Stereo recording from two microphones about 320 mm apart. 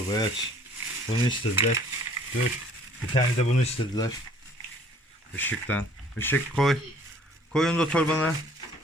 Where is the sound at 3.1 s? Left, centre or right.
Centre.